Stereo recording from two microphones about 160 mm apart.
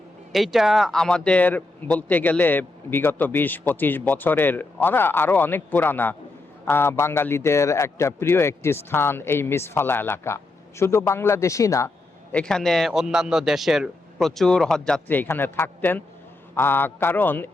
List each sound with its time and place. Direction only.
0.3 s speech: centre (ahead or behind); by 11.9 s 20° left (ahead or behind)
12.3 s a man's voice: 5° left (ahead or behind)